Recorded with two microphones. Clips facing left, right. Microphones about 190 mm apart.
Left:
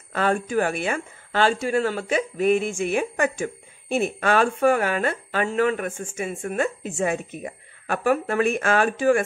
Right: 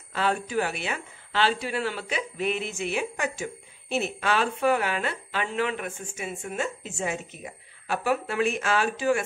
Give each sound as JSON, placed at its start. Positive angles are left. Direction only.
{"t": 0.1, "sound": "a woman's voice", "side_deg": 50}